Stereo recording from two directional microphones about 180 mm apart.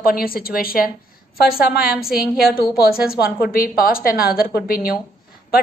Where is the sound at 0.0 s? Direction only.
55° left (ahead or behind).